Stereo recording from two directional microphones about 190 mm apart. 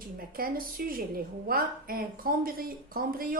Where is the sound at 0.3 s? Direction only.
50° right (ahead or behind).